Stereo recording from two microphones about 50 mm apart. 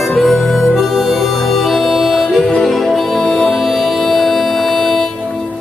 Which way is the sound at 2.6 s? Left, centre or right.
Centre.